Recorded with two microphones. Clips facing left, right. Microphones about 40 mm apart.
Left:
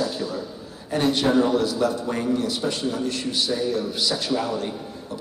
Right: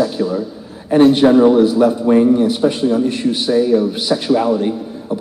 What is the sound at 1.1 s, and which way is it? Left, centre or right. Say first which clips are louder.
A man's voice: right 10 dB; right.